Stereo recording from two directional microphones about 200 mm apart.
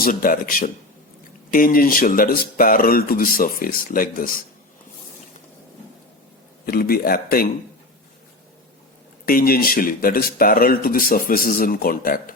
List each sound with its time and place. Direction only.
0.0 s speech: 45° left (ahead or behind)
6.7 s speech: 50° left (ahead or behind)
9.2 s speech: 45° left (ahead or behind)